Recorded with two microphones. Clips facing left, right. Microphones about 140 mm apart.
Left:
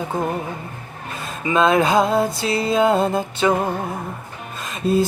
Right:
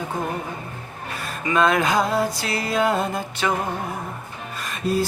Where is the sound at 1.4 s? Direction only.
25° left (ahead or behind).